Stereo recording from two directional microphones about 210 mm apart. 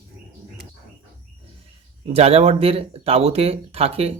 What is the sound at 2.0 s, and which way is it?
Speech, 30° right (ahead or behind).